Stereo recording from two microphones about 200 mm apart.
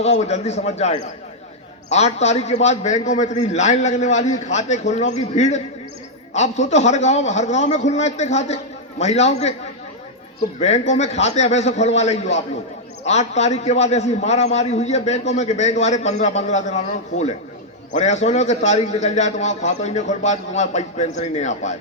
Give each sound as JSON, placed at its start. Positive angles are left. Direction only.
{"t": 0.0, "sound": "a man's voice", "side_deg": 35}
{"t": 10.6, "sound": "a man's voice", "side_deg": 35}